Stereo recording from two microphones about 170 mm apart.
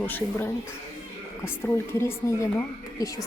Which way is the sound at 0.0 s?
10° left (ahead or behind).